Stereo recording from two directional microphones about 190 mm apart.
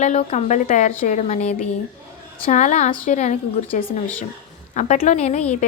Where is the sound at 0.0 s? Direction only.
35° left (ahead or behind).